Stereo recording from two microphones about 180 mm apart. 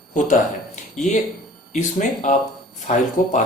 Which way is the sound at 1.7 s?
45° left (ahead or behind).